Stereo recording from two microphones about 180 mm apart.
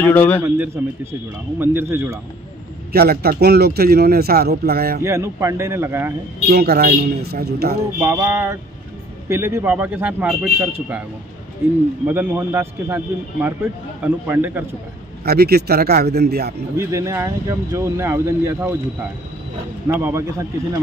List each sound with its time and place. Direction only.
0.0 s a man's voice: 10° left (ahead or behind)
1.6 s speech: 10° right (ahead or behind)
2.9 s a man's voice: 60° right (ahead or behind)
5.0 s speech: 15° right (ahead or behind)
6.5 s a man's voice: 60° right (ahead or behind)
8.0 s speech: 15° right (ahead or behind)
15.2 s a man's voice: 60° right (ahead or behind)
16.7 s speech: 15° right (ahead or behind)
19.9 s speech: 15° right (ahead or behind)